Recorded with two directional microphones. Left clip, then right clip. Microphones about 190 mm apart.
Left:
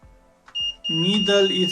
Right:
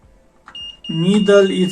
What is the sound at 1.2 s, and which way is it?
Speech, 25° left (ahead or behind).